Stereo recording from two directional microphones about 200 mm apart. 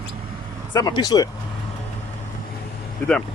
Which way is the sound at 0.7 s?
20° left (ahead or behind).